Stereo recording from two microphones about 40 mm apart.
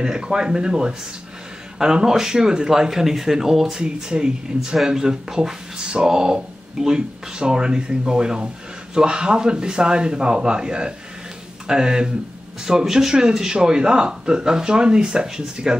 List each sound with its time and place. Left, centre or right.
0.0 s speech: centre
3.8 s speech: right